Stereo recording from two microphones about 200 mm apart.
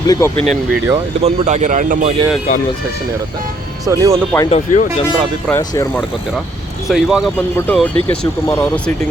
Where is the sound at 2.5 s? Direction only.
35° left (ahead or behind).